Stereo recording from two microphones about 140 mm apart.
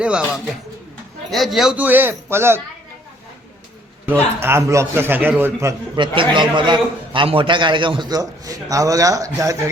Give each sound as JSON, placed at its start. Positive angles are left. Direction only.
{"t": 0.0, "sound": "a man's voice", "side_deg": -5}
{"t": 4.0, "sound": "a man's voice", "side_deg": -15}
{"t": 6.0, "sound": "a man's voice", "side_deg": -35}